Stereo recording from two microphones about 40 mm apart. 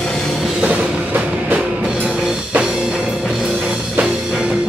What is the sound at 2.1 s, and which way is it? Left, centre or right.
Music, centre.